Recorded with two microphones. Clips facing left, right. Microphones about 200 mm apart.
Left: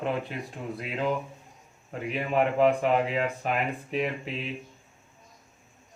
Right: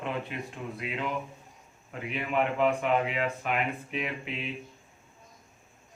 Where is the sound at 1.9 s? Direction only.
40° left (ahead or behind).